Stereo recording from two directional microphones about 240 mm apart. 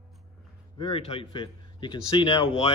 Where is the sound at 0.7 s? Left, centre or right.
Left.